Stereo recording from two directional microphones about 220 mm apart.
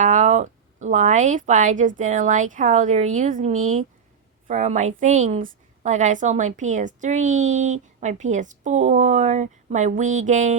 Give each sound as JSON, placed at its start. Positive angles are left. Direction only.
{"t": 0.0, "sound": "a woman's voice", "side_deg": -35}